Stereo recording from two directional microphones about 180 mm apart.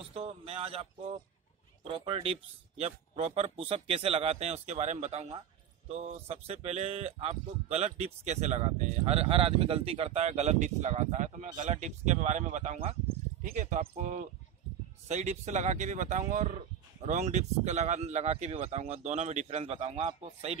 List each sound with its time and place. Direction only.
0.1 s speech: 35° right (ahead or behind)